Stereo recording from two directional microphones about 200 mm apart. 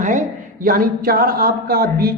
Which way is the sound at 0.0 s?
40° right (ahead or behind).